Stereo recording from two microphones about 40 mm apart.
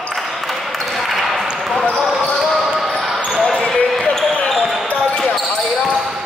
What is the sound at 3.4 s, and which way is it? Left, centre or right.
Basketball bounce, left.